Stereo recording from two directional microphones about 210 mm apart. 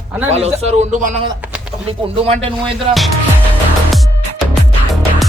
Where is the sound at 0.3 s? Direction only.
30° right (ahead or behind).